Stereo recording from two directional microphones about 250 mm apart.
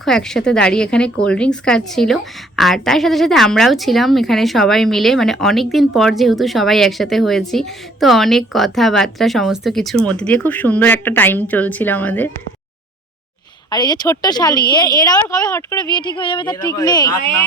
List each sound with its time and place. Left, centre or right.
0.0 s speech: centre
13.7 s speech: centre